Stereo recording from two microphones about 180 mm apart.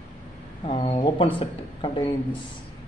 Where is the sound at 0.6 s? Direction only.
30° left (ahead or behind).